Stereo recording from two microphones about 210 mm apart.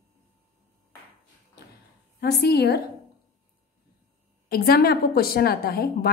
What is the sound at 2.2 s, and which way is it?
Speech, 50° left (ahead or behind).